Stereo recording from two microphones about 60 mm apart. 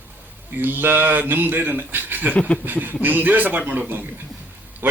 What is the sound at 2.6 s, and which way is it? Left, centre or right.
A man's voice, right.